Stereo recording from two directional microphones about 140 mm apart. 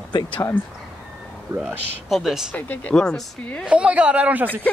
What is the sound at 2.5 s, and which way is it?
Speech, 10° left (ahead or behind).